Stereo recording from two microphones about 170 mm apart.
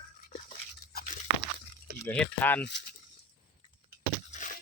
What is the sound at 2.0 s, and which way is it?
Speech, 10° left (ahead or behind).